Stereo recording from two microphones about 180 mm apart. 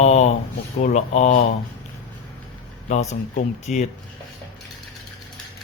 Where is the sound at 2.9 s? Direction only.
40° left (ahead or behind).